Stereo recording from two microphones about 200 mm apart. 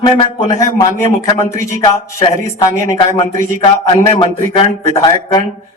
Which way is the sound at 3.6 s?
25° left (ahead or behind).